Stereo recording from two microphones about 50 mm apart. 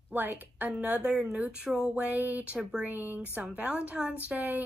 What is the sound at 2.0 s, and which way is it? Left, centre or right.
A woman's voice, right.